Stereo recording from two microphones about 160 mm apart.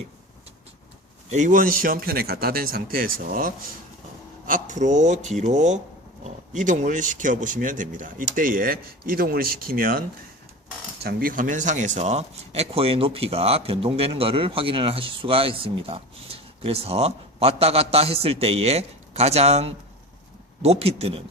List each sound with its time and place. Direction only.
1.3 s speech: 50° right (ahead or behind)
11.0 s speech: 70° right (ahead or behind); by 21.2 s 35° right (ahead or behind)